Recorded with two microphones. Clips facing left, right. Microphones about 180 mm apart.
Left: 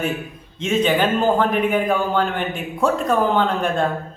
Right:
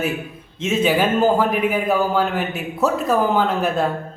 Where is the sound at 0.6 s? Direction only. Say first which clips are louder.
Even; 5° right (ahead or behind).